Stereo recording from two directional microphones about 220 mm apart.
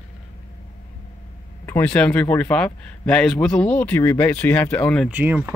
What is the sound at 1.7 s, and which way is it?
A man's voice, 5° left (ahead or behind).